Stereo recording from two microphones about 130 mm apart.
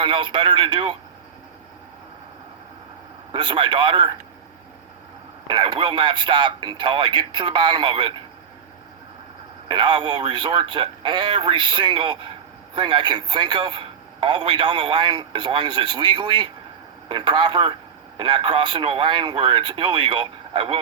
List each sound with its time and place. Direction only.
0.0 s a man's voice: 35° right (ahead or behind)
3.3 s a man's voice: 35° right (ahead or behind)
5.5 s a man's voice: 35° right (ahead or behind)
9.6 s a man's voice: 35° right (ahead or behind)